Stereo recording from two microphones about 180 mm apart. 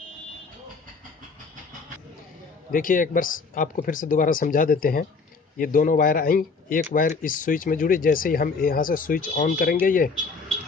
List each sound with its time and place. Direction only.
2.7 s speech: 50° left (ahead or behind)